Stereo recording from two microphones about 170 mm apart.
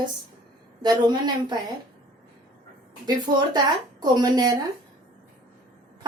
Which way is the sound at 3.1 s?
25° right (ahead or behind).